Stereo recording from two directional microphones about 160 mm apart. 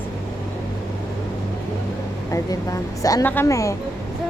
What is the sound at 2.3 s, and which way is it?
A man's voice, 20° left (ahead or behind).